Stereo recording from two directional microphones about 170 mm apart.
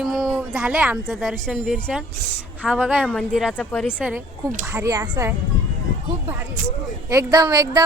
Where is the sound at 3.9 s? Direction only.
10° right (ahead or behind).